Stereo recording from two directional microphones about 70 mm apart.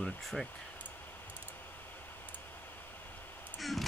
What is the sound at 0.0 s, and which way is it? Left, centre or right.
Speech, centre.